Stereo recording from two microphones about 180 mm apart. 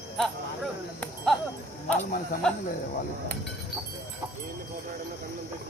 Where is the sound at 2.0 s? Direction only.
45° left (ahead or behind).